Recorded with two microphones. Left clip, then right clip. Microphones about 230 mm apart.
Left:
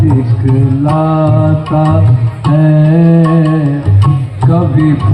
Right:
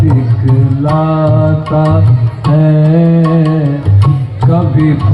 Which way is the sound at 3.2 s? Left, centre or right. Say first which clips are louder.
Left 1 dB; right.